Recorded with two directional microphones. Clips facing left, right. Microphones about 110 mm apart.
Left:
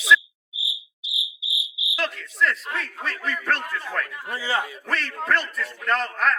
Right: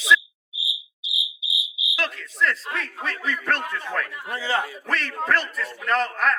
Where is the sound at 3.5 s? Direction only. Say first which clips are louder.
Right 1 dB; 30° right (ahead or behind).